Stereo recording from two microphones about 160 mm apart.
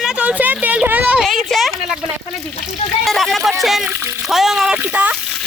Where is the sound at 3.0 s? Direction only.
Centre (ahead or behind).